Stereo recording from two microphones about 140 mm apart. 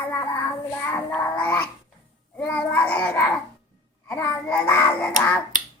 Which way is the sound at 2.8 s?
15° left (ahead or behind).